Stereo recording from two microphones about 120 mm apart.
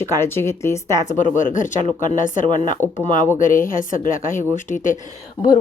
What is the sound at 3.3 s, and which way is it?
A woman's voice, 90° left.